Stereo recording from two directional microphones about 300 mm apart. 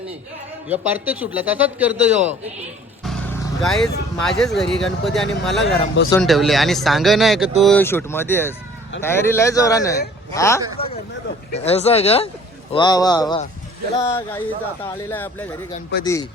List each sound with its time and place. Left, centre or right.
0.7 s speech: centre
3.6 s speech: centre
10.8 s speech: left
11.5 s speech: left
15.9 s speech: left